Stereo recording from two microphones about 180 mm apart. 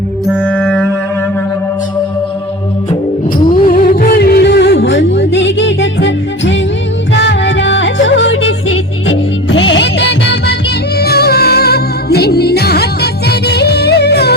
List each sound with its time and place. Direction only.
0.3 s music: centre (ahead or behind)
3.4 s music: 25° left (ahead or behind)
3.7 s music: 55° left (ahead or behind); by 6.6 s 90° left
7.1 s music: 70° left (ahead or behind)
10.9 s music: 60° left (ahead or behind)